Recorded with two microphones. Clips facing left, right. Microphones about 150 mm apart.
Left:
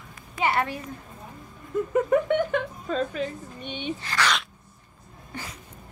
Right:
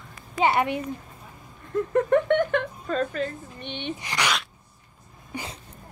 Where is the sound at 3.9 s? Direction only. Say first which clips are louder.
Left 2 dB; 15° right (ahead or behind).